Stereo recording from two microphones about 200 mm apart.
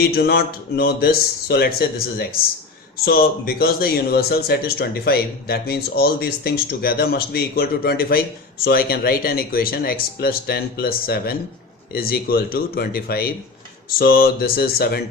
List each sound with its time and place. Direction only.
0.0 s speech: 50° left (ahead or behind)